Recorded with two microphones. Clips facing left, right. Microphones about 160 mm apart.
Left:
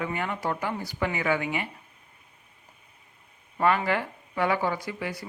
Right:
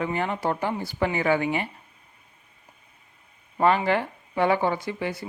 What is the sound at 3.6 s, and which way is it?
Speech, 25° right (ahead or behind).